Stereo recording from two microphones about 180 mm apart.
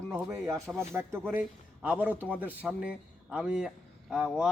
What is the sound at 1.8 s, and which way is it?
A man's voice, 10° right (ahead or behind).